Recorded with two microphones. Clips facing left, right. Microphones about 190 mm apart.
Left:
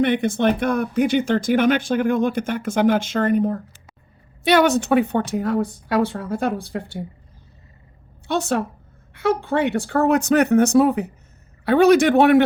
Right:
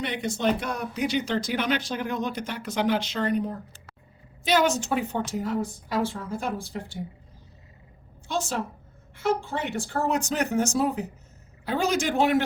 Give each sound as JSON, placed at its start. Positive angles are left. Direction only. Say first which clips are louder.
{"t": 0.0, "sound": "a woman's voice", "louder": "left 8 dB", "side_deg": 55}
{"t": 8.3, "sound": "a woman's voice", "louder": "left 7 dB", "side_deg": 65}